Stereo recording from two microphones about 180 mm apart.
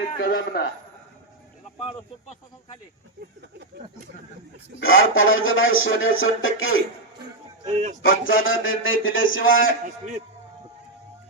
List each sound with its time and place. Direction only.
0.2 s a man's voice: 55° left (ahead or behind)
1.8 s speech: 30° left (ahead or behind)
4.8 s speech: 90° left
7.6 s speech: 40° right (ahead or behind)
8.0 s speech: 90° left